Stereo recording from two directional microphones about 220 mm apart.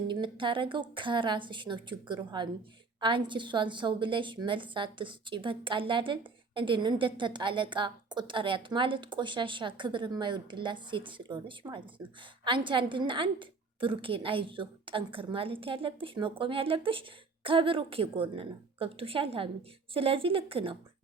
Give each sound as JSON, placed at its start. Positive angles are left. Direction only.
{"t": 0.1, "sound": "a woman's voice", "side_deg": -20}